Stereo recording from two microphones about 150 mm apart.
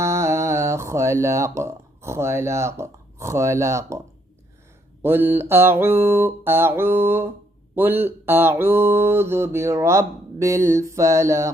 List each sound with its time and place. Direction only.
0.0 s music: 20° right (ahead or behind)
5.0 s mantra: 15° right (ahead or behind)